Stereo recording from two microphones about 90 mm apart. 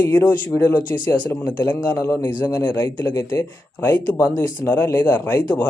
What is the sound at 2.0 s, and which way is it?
Speech, 25° left (ahead or behind).